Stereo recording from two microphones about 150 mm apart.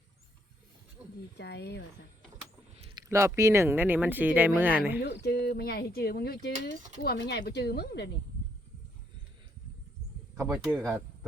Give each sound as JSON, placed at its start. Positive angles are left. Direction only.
{"t": 1.5, "sound": "speech", "side_deg": 90}
{"t": 3.1, "sound": "speech", "side_deg": -20}
{"t": 5.2, "sound": "speech", "side_deg": 90}
{"t": 10.4, "sound": "speech", "side_deg": -15}